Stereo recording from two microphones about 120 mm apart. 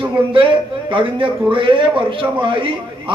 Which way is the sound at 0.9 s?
45° right (ahead or behind).